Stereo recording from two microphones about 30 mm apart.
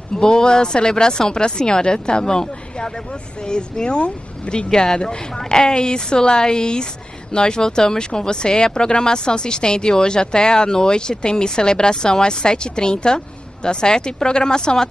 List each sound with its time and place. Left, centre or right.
0.1 s speech: left